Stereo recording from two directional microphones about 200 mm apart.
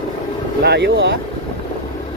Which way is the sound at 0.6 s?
60° right (ahead or behind).